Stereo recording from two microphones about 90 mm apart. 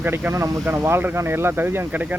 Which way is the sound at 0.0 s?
25° right (ahead or behind).